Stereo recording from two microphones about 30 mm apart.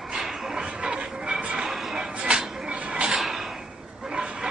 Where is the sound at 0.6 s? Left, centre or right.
Right.